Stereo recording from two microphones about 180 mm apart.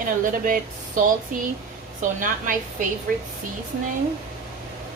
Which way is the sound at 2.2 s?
45° right (ahead or behind).